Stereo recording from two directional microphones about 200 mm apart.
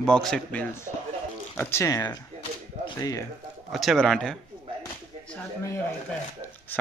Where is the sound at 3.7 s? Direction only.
Centre (ahead or behind).